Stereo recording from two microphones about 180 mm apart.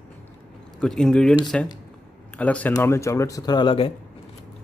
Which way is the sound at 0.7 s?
5° left (ahead or behind).